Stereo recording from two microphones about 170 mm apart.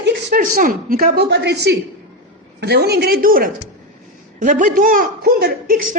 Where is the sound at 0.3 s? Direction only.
55° right (ahead or behind).